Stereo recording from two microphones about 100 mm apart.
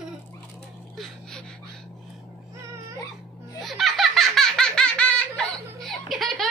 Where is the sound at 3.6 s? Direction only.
Centre (ahead or behind).